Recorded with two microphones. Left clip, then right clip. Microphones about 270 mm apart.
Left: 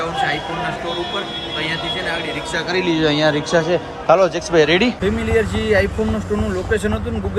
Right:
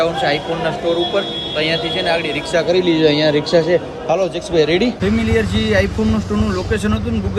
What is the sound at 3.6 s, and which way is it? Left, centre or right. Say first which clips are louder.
Speech: even; centre.